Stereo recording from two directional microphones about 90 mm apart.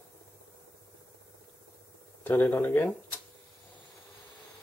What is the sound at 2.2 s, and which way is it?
Speech, 20° left (ahead or behind).